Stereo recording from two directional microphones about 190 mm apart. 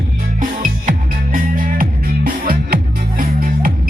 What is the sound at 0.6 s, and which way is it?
Music, 45° right (ahead or behind).